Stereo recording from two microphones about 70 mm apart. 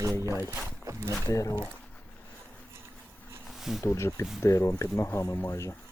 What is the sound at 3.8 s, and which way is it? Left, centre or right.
Speech, left.